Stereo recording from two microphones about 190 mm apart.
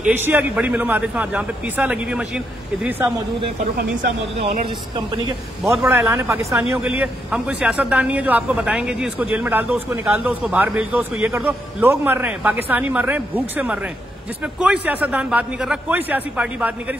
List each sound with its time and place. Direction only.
0.0 s a man's voice: 10° right (ahead or behind)
4.4 s speech: 30° right (ahead or behind)
5.9 s a man's voice: 10° right (ahead or behind)